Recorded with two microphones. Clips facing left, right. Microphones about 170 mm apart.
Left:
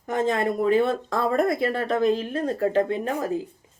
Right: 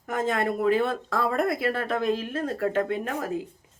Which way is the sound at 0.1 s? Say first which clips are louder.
Left 3 dB; centre (ahead or behind).